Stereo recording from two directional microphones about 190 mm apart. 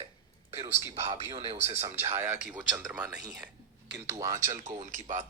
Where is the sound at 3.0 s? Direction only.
20° right (ahead or behind).